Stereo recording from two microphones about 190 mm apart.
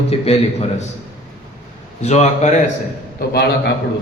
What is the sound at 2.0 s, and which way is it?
Speech, 35° left (ahead or behind).